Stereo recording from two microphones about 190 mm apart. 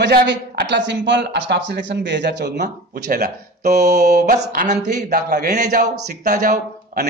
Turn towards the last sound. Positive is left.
turn(degrees=-55)  # may be behind; listen again after turning